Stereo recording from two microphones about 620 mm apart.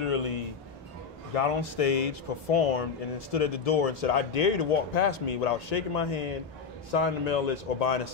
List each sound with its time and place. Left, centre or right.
0.0 s music: left
1.3 s speech: left